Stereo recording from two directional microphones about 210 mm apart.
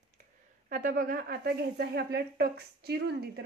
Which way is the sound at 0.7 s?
40° right (ahead or behind).